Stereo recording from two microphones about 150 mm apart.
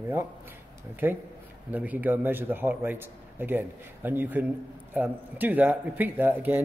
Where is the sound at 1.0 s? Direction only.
15° right (ahead or behind).